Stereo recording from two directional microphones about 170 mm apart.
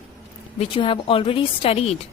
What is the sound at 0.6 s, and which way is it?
A woman's voice, 30° left (ahead or behind).